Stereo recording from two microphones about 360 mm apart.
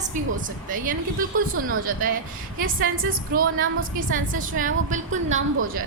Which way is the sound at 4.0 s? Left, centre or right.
Right.